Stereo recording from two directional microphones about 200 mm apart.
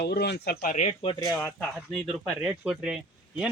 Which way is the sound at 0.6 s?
40° left (ahead or behind).